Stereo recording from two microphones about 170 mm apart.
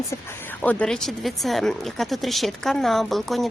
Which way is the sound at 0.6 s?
10° left (ahead or behind).